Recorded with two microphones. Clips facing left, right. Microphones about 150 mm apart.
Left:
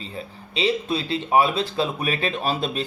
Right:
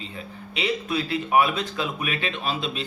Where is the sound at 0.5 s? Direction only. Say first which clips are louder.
Left 3 dB; 30° left (ahead or behind).